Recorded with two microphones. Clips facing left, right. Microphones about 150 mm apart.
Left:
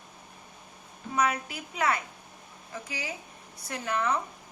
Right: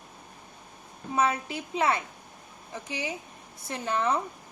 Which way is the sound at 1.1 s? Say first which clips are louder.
Right 2 dB; 25° right (ahead or behind).